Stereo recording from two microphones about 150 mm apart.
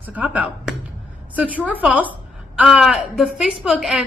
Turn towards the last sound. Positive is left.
turn(degrees=0)  # may be behind; listen again after turning